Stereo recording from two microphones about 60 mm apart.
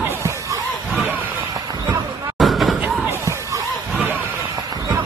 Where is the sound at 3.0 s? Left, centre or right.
Right.